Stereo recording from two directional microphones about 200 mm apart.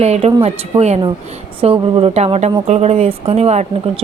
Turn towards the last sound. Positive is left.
turn(degrees=-30)  # may be behind; listen again after turning